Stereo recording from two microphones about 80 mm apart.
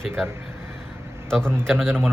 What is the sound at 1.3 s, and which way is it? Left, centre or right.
Mantra, centre.